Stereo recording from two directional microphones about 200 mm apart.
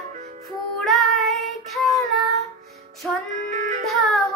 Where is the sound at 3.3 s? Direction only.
40° right (ahead or behind).